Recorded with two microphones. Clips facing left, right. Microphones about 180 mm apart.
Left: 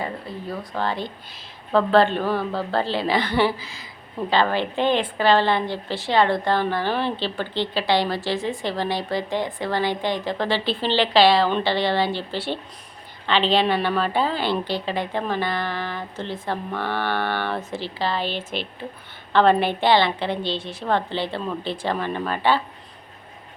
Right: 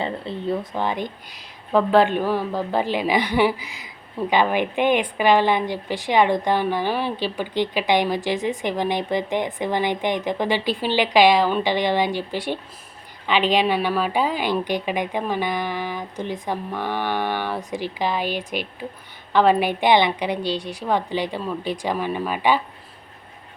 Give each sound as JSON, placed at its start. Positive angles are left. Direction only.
{"t": 0.0, "sound": "a woman's voice", "side_deg": -25}